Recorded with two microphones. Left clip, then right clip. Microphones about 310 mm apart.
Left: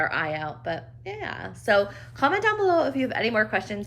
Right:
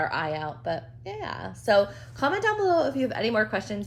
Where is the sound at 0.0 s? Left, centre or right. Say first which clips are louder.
Left 2 dB; centre.